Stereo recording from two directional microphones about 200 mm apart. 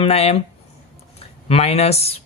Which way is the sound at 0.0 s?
30° left (ahead or behind).